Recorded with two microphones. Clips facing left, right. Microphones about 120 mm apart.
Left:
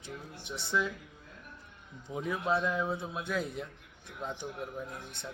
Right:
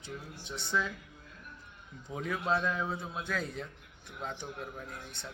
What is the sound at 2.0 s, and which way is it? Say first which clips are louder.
A man's voice: left 1 dB; 20° left (ahead or behind).